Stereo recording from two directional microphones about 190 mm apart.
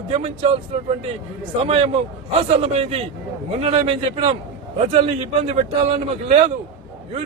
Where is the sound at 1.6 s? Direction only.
30° right (ahead or behind).